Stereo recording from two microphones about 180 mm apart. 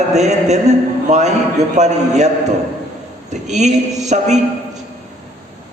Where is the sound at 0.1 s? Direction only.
40° right (ahead or behind).